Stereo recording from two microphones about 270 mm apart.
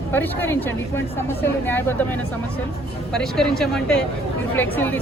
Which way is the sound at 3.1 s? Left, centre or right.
Centre.